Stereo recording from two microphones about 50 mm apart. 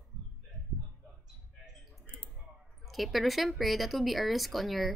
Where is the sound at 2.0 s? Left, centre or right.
Left.